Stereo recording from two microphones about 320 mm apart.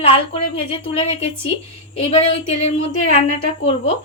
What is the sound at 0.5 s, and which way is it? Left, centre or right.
A woman's voice, centre.